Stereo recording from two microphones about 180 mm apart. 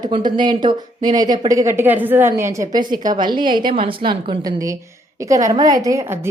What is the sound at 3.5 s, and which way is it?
Speech, 50° right (ahead or behind).